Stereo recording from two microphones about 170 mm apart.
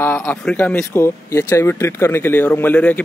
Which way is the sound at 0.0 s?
10° left (ahead or behind).